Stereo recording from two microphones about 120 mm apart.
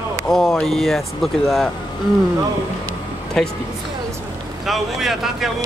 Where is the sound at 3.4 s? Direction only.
5° left (ahead or behind).